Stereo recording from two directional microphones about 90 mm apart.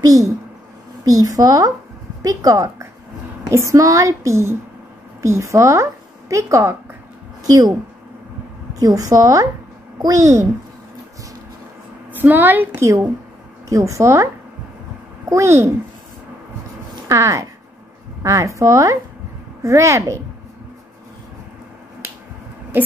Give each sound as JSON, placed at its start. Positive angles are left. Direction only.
{"t": 0.0, "sound": "a woman's voice", "side_deg": -40}
{"t": 7.4, "sound": "speech", "side_deg": -45}
{"t": 8.7, "sound": "speech", "side_deg": -45}
{"t": 12.1, "sound": "a woman's voice", "side_deg": -20}
{"t": 13.7, "sound": "speech", "side_deg": -35}
{"t": 17.1, "sound": "speech", "side_deg": -35}